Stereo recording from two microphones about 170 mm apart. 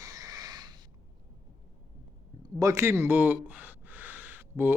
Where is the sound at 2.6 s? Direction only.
15° right (ahead or behind).